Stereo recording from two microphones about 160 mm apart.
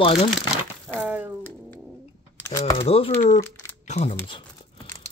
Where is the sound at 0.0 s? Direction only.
40° left (ahead or behind).